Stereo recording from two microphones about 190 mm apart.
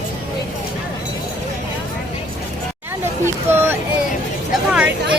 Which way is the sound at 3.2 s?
10° right (ahead or behind).